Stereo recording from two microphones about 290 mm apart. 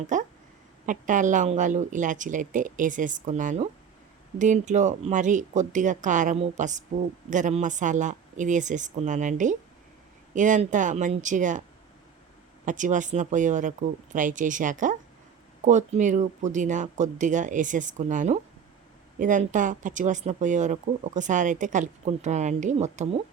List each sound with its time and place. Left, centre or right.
0.1 s speech: right
12.6 s speech: right